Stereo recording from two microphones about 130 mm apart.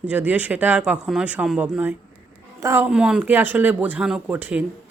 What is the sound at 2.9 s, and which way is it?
Speech, 5° right (ahead or behind).